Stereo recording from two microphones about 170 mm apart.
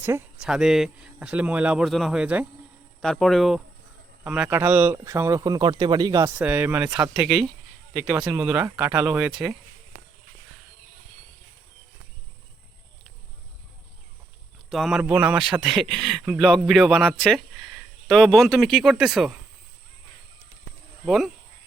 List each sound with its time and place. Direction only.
0.4 s a man's voice: 5° right (ahead or behind)
3.0 s a man's voice: centre (ahead or behind); by 6.3 s 20° right (ahead or behind)
6.4 s a man's voice: 10° right (ahead or behind)
14.7 s a man's voice: centre (ahead or behind)
21.0 s speech: centre (ahead or behind)